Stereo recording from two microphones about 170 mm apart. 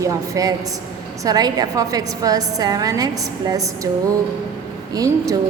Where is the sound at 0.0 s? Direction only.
20° right (ahead or behind).